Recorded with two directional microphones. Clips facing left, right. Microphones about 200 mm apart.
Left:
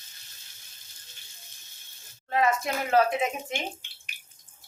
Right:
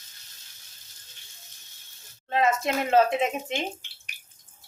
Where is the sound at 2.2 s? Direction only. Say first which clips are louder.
Right 1 dB; 25° right (ahead or behind).